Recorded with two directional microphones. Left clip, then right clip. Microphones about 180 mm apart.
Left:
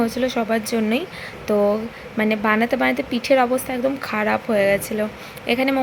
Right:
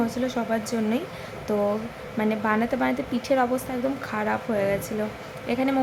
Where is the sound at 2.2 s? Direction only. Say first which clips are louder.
Left 5 dB; 20° left (ahead or behind).